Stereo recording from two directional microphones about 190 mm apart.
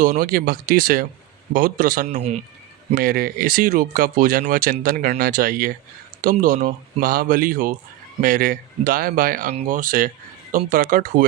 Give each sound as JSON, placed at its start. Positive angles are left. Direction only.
{"t": 0.0, "sound": "speech", "side_deg": -50}
{"t": 2.0, "sound": "speech", "side_deg": -35}
{"t": 2.9, "sound": "speech", "side_deg": -50}